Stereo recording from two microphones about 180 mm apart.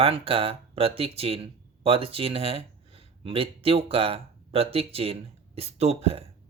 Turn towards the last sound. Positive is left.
turn(degrees=-35)  # may be behind; listen again after turning